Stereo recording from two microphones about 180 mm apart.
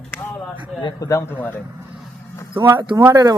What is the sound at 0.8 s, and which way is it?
Speech, 20° left (ahead or behind).